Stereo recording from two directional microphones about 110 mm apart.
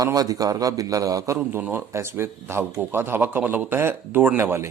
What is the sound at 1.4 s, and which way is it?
Speech, 15° right (ahead or behind).